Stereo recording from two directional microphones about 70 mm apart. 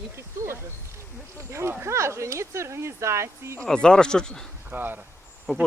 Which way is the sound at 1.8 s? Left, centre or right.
Right.